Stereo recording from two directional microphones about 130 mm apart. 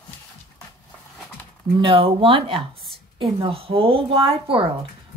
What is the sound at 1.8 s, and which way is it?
Speech, 40° right (ahead or behind).